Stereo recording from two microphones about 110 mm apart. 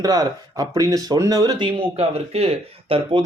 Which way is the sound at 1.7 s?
60° right (ahead or behind).